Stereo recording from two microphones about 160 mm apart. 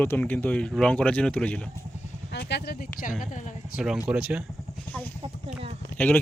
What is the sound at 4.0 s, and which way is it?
Speech, 5° right (ahead or behind).